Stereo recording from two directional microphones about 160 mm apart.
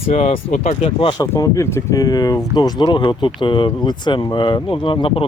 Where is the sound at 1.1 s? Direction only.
20° left (ahead or behind).